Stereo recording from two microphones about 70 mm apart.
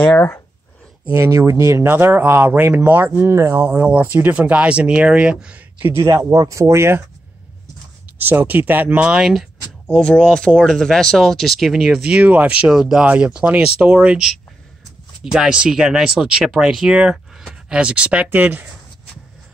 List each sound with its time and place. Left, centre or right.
1.1 s speech: right
1.9 s speech: right
3.1 s speech: right
3.6 s speech: centre
5.9 s speech: right
8.3 s speech: right; by 9.5 s centre
9.8 s speech: centre
15.3 s speech: centre; by 18.7 s right